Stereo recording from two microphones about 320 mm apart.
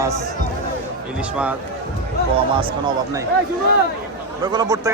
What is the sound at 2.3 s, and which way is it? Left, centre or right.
Speech, centre.